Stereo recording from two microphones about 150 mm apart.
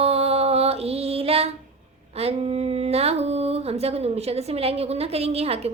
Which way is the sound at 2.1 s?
45° right (ahead or behind).